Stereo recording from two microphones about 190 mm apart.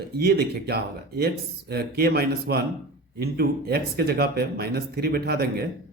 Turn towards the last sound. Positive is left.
turn(degrees=-55)  # may be behind; listen again after turning